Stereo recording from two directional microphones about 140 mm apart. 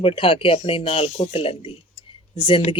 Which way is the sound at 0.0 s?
40° left (ahead or behind).